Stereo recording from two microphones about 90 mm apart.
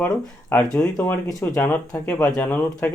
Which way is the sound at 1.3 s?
40° left (ahead or behind).